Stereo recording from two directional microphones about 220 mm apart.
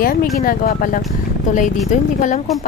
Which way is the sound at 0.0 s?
40° left (ahead or behind).